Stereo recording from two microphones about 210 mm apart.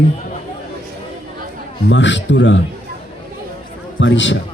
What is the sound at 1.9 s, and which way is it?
Speech, 60° left (ahead or behind).